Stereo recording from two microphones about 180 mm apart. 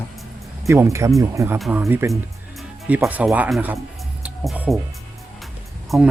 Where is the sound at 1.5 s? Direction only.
Centre (ahead or behind).